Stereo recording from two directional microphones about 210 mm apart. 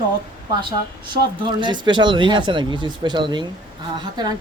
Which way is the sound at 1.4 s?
20° right (ahead or behind).